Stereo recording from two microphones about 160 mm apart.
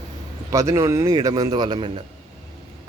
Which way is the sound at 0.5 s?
20° right (ahead or behind).